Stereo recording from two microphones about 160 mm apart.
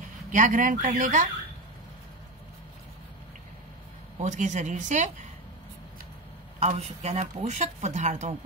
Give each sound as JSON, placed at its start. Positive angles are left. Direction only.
{"t": 0.3, "sound": "speech", "side_deg": -55}
{"t": 4.2, "sound": "speech", "side_deg": -50}
{"t": 6.6, "sound": "speech", "side_deg": -40}